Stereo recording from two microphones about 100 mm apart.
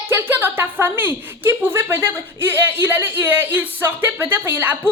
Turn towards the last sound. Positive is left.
turn(degrees=-20)  # may be behind; listen again after turning